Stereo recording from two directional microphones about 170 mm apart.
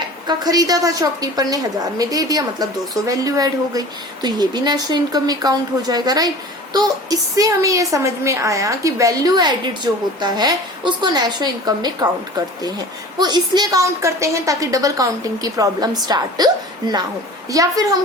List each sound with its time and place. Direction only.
0.3 s a woman's voice: 20° right (ahead or behind)
13.1 s a woman's voice: 25° right (ahead or behind)
17.5 s a woman's voice: 20° right (ahead or behind)